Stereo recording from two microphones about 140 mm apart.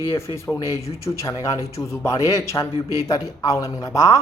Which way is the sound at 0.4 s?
20° left (ahead or behind).